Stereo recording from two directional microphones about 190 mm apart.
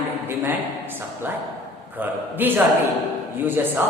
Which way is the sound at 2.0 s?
10° right (ahead or behind).